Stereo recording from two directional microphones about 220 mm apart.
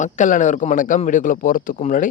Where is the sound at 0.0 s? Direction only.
35° left (ahead or behind).